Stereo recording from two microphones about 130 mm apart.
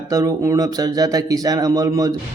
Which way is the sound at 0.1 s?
25° right (ahead or behind).